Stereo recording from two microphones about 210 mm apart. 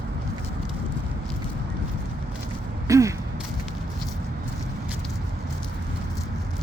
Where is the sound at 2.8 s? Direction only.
15° right (ahead or behind).